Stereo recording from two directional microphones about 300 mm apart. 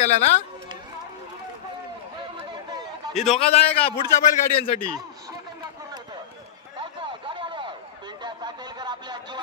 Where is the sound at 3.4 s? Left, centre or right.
Centre.